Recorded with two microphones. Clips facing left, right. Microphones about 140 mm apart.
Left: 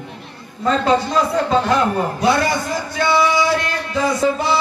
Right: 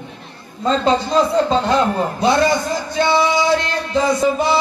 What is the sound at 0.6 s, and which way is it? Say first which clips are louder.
A man's voice: even; 25° right (ahead or behind).